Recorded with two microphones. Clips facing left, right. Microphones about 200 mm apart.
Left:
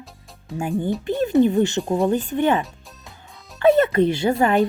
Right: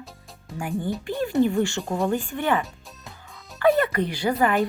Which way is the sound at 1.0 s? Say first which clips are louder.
Left 5 dB; 20° left (ahead or behind).